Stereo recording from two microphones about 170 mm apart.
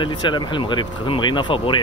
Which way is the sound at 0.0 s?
25° left (ahead or behind).